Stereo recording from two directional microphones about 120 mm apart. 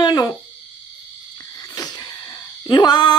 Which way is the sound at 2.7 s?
35° left (ahead or behind).